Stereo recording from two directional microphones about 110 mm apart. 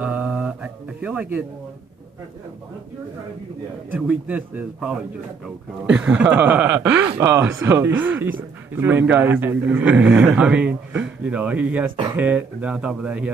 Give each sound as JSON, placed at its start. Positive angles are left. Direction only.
{"t": 0.0, "sound": "mantra", "side_deg": -10}
{"t": 3.9, "sound": "speech", "side_deg": -15}